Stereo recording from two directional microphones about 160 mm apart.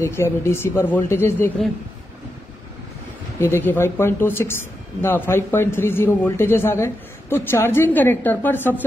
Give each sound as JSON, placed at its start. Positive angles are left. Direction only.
{"t": 0.0, "sound": "a man's voice", "side_deg": 15}
{"t": 3.3, "sound": "a man's voice", "side_deg": 15}